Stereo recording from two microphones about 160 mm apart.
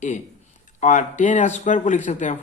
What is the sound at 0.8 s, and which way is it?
Speech, 50° left (ahead or behind).